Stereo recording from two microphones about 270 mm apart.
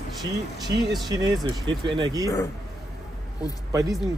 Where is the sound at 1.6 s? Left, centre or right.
Centre.